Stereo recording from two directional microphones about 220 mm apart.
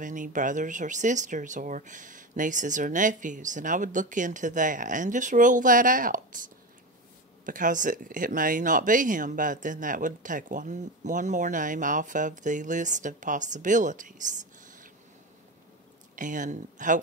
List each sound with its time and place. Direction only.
0.0 s speech: 35° right (ahead or behind)
7.4 s speech: 35° right (ahead or behind)
16.2 s speech: 35° right (ahead or behind)